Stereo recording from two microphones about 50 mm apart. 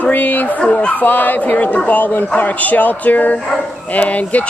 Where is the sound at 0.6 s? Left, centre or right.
Left.